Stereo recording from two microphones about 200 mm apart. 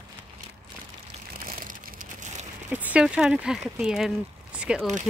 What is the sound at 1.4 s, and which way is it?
Crushing, 45° right (ahead or behind).